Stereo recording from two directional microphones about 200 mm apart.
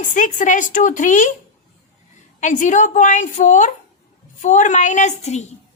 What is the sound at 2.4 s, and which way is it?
A woman's voice, 40° left (ahead or behind).